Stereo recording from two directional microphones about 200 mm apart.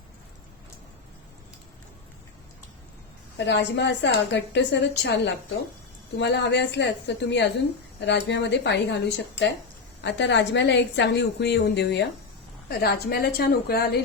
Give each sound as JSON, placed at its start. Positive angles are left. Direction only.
{"t": 3.3, "sound": "a woman's voice", "side_deg": 60}